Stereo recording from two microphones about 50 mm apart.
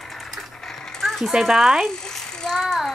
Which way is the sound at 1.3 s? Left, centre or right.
Centre.